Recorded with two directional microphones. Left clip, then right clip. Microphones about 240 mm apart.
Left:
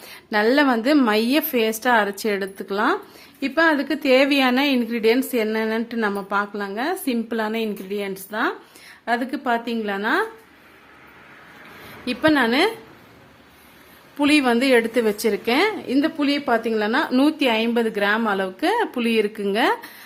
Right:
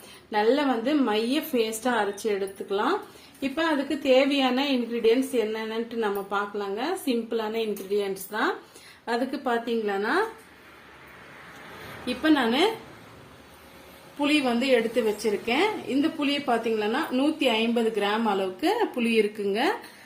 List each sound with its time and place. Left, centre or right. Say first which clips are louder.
0.3 s a woman's voice: left 5 dB; left
12.0 s a woman's voice: left 5 dB; left
14.2 s a woman's voice: left 6 dB; left